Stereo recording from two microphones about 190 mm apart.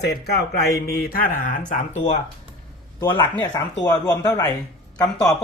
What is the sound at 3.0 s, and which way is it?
A man's voice, 25° left (ahead or behind).